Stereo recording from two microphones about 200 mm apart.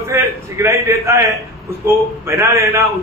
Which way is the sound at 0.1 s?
15° right (ahead or behind).